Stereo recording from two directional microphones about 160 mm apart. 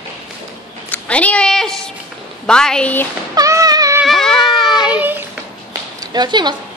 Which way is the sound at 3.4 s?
20° right (ahead or behind).